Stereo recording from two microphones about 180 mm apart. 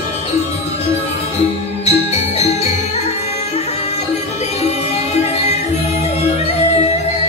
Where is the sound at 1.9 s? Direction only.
35° left (ahead or behind).